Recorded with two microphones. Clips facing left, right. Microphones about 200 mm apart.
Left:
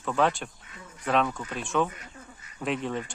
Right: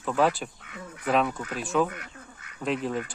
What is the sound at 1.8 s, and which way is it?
Speech, 70° right (ahead or behind).